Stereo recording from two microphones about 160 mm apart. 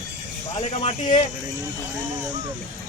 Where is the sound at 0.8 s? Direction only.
40° left (ahead or behind).